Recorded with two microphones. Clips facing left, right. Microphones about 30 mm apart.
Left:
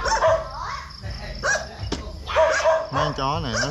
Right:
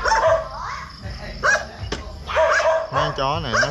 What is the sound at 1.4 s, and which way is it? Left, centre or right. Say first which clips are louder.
Dog: right 5 dB; centre.